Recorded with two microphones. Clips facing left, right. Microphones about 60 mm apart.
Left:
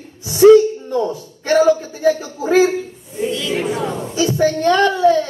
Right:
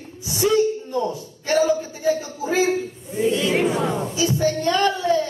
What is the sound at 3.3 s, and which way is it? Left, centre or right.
Speech, right.